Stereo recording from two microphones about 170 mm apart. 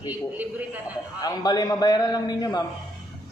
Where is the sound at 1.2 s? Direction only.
20° left (ahead or behind).